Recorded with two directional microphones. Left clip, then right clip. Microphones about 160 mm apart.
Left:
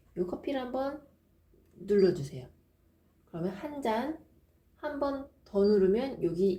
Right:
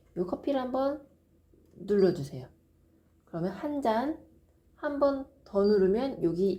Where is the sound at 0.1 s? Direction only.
30° right (ahead or behind).